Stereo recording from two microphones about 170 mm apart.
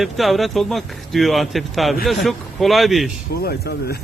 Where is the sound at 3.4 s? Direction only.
65° left (ahead or behind).